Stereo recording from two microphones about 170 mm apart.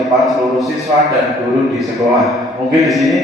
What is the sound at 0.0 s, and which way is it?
Speech, centre (ahead or behind).